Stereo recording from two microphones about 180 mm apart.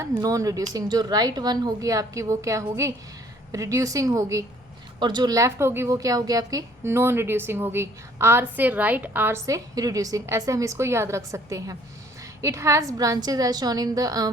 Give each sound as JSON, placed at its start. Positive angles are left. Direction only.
{"t": 0.2, "sound": "a woman's voice", "side_deg": -20}